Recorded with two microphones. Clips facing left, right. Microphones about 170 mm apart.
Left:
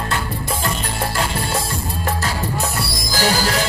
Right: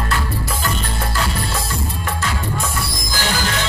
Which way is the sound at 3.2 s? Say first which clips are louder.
Left 4 dB; 35° left (ahead or behind).